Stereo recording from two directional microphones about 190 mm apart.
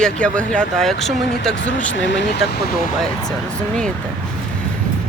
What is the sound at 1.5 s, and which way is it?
Speech, 70° left (ahead or behind).